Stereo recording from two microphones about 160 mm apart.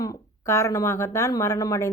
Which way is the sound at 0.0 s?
20° left (ahead or behind).